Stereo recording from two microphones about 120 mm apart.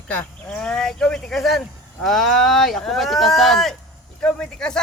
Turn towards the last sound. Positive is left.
turn(degrees=5)  # may be behind; listen again after turning